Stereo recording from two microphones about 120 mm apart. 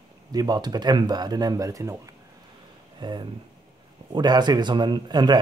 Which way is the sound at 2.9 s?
40° right (ahead or behind).